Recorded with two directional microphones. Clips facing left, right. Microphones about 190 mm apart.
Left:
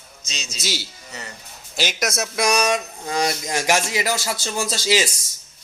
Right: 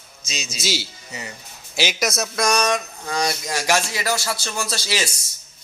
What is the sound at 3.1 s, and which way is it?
Speech, 20° left (ahead or behind).